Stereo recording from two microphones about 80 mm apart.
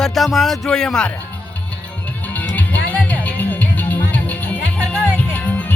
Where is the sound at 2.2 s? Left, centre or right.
Left.